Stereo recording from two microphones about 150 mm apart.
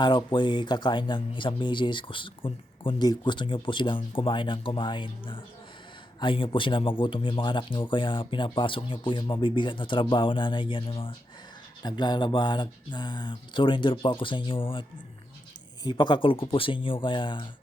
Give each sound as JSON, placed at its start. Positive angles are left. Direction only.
{"t": 0.0, "sound": "speech", "side_deg": 30}